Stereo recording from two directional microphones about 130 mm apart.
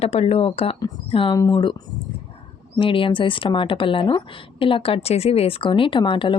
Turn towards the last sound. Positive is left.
turn(degrees=40)  # may be behind; listen again after turning